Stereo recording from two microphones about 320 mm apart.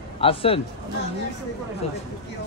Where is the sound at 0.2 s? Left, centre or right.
Centre.